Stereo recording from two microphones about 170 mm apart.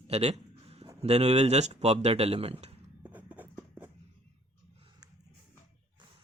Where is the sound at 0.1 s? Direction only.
40° right (ahead or behind).